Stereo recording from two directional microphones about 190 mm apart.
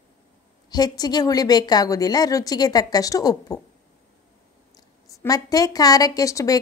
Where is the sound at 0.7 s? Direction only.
20° left (ahead or behind).